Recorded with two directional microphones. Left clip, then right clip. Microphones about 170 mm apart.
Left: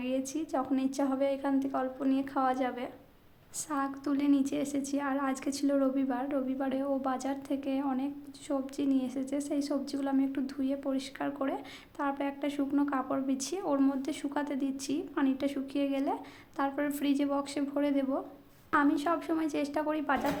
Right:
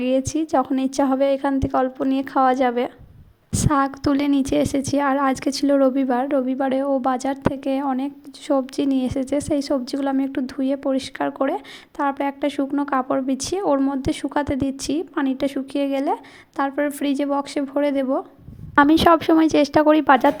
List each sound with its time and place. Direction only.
0.0 s a woman's voice: 45° right (ahead or behind)
18.8 s a woman's voice: 55° right (ahead or behind)